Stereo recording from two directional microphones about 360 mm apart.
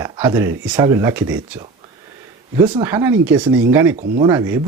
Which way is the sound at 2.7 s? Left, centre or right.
Centre.